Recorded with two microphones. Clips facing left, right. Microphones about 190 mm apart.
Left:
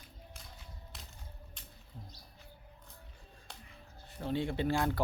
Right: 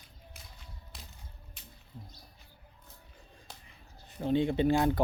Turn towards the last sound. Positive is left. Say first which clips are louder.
# right 6 dB
turn(degrees=-20)  # may be behind; listen again after turning